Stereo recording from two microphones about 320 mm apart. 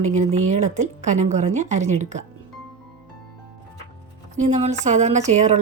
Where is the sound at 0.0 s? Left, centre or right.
Right.